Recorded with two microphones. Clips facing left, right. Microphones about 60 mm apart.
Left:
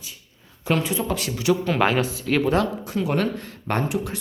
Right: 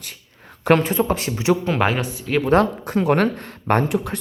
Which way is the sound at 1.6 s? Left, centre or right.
Centre.